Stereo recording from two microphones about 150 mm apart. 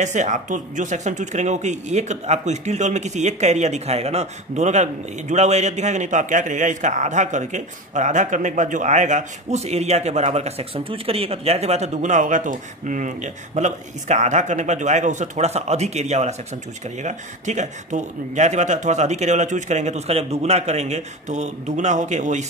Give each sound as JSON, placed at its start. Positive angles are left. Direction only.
{"t": 0.0, "sound": "a man's voice", "side_deg": -55}